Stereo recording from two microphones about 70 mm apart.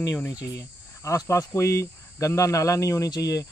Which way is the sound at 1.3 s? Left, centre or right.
Left.